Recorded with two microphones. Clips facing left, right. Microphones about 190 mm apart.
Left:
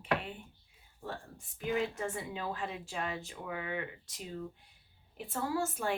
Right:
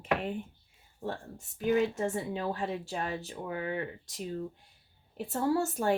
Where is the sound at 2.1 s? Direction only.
40° right (ahead or behind).